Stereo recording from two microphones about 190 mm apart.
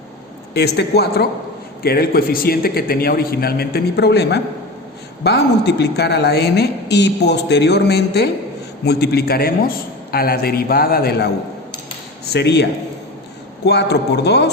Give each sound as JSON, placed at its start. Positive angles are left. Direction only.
{"t": 0.8, "sound": "a woman's voice", "side_deg": 55}
{"t": 13.7, "sound": "a woman's voice", "side_deg": 60}